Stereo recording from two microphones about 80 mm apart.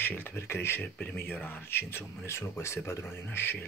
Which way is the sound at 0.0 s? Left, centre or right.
Left.